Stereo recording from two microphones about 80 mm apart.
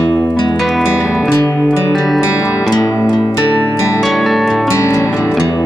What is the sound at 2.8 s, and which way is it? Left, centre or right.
Music, left.